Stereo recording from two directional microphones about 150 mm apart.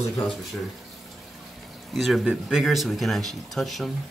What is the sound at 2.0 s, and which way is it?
Speech, centre (ahead or behind).